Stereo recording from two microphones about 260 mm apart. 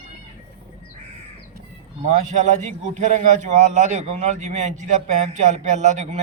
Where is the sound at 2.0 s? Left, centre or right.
Right.